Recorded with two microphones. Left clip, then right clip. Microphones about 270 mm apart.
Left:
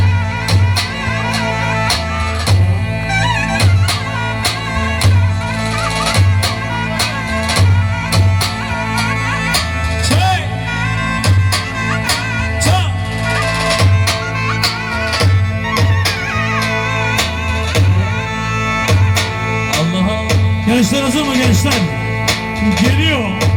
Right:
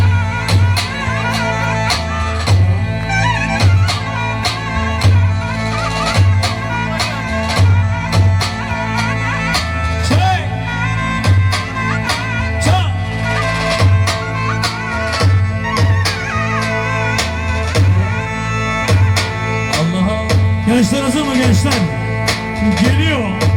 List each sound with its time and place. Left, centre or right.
9.4 s music: centre
13.2 s music: centre
15.7 s music: centre
18.6 s music: centre